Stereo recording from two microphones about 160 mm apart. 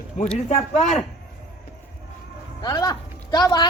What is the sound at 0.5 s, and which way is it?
Speech, 45° left (ahead or behind).